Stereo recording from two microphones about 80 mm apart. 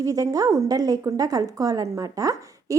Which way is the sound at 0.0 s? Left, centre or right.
Right.